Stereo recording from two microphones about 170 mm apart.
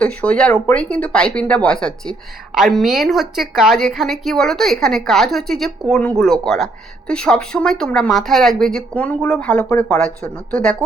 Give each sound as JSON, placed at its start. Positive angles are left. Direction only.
{"t": 0.0, "sound": "a woman's voice", "side_deg": 5}
{"t": 9.6, "sound": "speech", "side_deg": 15}
{"t": 10.0, "sound": "a woman's voice", "side_deg": 5}